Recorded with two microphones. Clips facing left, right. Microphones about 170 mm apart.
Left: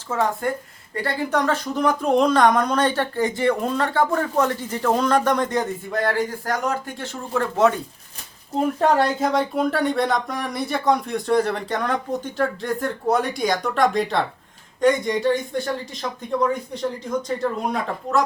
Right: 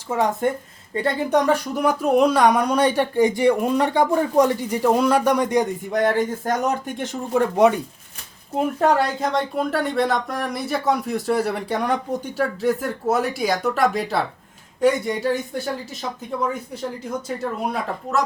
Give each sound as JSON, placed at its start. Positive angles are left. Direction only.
{"t": 0.1, "sound": "a woman's voice", "side_deg": -20}
{"t": 8.5, "sound": "a woman's voice", "side_deg": -5}